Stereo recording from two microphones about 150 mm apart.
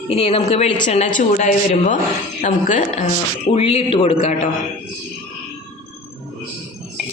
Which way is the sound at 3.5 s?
45° left (ahead or behind).